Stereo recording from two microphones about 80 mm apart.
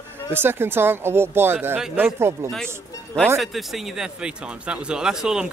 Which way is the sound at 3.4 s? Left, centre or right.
Centre.